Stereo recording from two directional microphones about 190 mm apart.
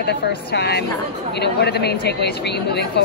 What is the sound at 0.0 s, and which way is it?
Speech, 60° left (ahead or behind).